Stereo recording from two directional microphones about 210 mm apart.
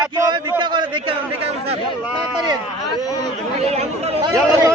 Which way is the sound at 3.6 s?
30° right (ahead or behind).